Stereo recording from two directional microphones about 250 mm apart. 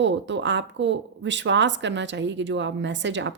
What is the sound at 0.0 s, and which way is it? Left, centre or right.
Speech, right.